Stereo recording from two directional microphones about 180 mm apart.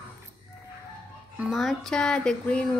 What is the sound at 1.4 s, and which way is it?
Speech, centre (ahead or behind).